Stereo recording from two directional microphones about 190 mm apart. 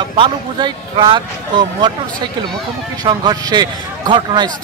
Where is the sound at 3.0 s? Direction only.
20° right (ahead or behind).